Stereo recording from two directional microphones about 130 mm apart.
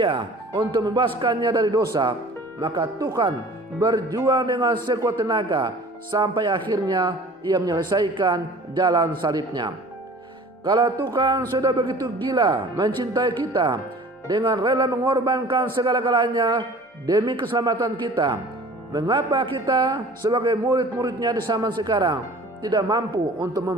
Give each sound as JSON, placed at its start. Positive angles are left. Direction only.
{"t": 0.0, "sound": "a man's voice", "side_deg": -35}